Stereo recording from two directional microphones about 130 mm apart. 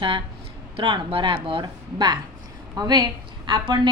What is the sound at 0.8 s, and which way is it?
A woman's voice, 40° right (ahead or behind).